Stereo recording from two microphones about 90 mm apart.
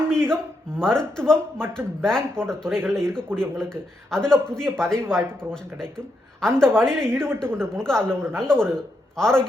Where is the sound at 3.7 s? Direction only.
10° left (ahead or behind).